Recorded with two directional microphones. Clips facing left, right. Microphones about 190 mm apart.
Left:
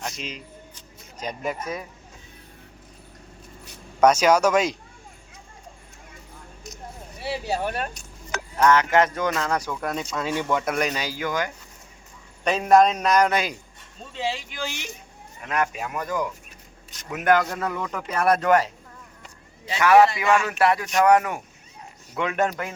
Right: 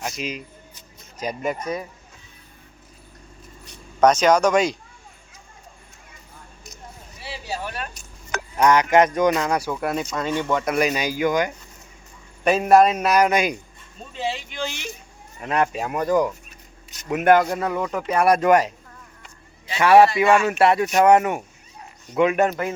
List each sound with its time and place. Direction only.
0.0 s speech: 10° right (ahead or behind)
4.0 s speech: 10° left (ahead or behind)
7.2 s a sound: 60° left (ahead or behind)
8.5 s speech: 15° right (ahead or behind)
10.2 s speech: 5° left (ahead or behind); by 11.5 s 15° right (ahead or behind)
12.5 s speech: 5° right (ahead or behind)
14.2 s speech: centre (ahead or behind)
15.4 s speech: 30° right (ahead or behind)
17.4 s speech: 20° right (ahead or behind)
19.8 s speech: 30° right (ahead or behind)